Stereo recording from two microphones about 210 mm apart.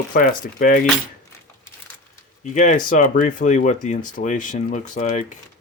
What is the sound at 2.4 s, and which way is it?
Speech, 35° left (ahead or behind).